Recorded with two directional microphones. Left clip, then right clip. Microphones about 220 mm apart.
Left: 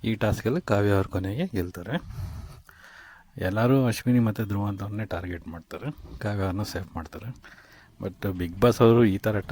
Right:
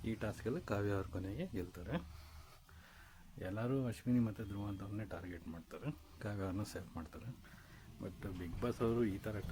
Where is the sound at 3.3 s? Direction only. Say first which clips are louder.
Left 17 dB; 45° left (ahead or behind).